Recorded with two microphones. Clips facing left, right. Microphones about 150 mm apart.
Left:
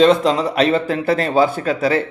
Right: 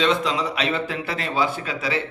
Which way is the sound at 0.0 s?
40° left (ahead or behind).